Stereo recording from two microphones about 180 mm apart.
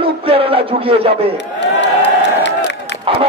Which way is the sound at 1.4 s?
75° left (ahead or behind).